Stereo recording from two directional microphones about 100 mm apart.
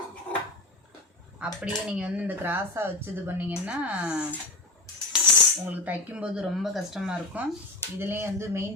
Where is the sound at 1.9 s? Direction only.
15° right (ahead or behind).